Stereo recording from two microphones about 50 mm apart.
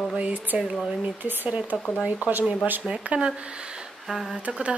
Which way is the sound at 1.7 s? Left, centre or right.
Centre.